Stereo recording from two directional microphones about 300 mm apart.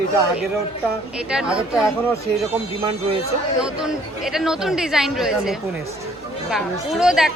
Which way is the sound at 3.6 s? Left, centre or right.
Centre.